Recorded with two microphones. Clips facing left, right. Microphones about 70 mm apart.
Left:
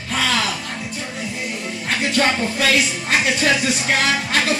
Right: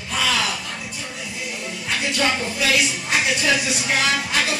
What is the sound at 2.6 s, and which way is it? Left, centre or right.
Music, left.